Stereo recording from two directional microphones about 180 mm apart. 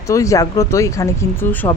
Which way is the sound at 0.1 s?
15° left (ahead or behind).